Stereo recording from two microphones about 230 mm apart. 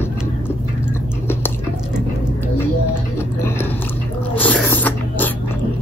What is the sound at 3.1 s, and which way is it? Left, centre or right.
Music, centre.